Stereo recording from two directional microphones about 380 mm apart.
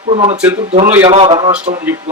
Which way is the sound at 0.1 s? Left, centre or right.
Centre.